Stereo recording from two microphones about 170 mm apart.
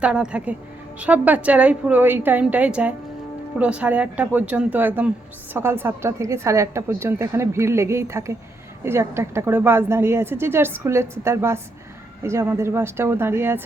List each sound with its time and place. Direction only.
0.0 s a woman's voice: 5° right (ahead or behind)